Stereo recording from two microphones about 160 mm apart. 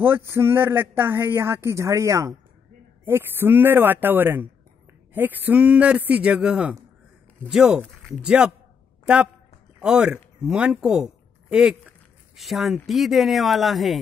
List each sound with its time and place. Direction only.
0.0 s a woman's voice: 15° right (ahead or behind)